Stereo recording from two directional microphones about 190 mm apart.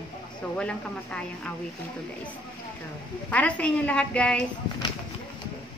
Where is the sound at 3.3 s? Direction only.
5° left (ahead or behind).